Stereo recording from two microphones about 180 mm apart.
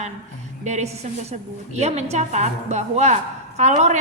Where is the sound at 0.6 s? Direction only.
40° right (ahead or behind).